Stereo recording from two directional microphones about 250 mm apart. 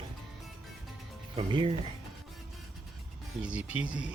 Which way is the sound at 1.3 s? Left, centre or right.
Centre.